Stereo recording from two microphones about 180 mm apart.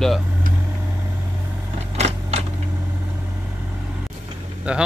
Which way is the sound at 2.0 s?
35° right (ahead or behind).